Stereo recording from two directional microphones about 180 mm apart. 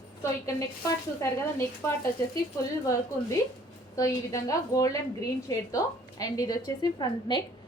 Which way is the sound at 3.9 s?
20° left (ahead or behind).